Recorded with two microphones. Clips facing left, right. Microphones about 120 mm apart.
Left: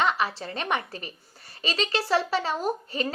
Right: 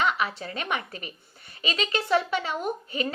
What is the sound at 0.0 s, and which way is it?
A woman's voice, 30° left (ahead or behind).